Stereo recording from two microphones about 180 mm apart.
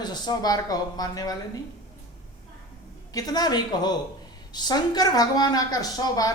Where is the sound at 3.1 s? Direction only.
20° left (ahead or behind).